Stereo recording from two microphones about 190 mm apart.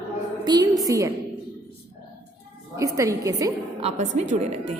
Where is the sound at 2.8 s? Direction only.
15° right (ahead or behind).